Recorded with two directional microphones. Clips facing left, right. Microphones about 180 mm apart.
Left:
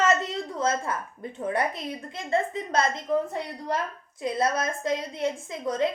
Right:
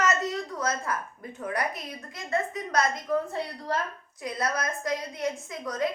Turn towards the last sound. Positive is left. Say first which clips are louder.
# left 3 dB
turn(degrees=25)  # may be behind; listen again after turning